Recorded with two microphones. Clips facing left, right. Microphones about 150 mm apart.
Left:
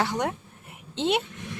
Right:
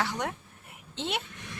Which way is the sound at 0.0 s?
30° left (ahead or behind).